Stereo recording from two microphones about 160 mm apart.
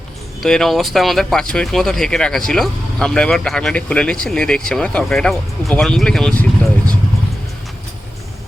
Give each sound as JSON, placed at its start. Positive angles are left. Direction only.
{"t": 0.4, "sound": "speech", "side_deg": 5}